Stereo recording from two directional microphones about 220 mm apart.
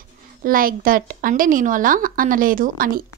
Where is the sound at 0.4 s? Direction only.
40° right (ahead or behind).